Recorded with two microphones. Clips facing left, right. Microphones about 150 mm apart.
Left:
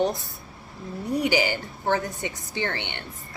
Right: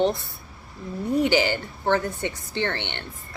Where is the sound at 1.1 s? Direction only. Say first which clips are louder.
Right 2 dB; 15° left (ahead or behind).